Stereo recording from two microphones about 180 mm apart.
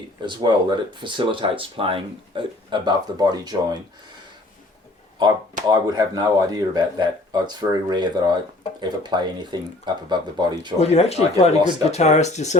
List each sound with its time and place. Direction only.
0.2 s speech: 25° right (ahead or behind)
5.2 s speech: 20° right (ahead or behind)
10.8 s speech: 35° left (ahead or behind)